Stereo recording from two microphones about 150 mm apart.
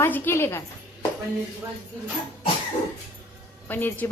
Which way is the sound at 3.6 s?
10° left (ahead or behind).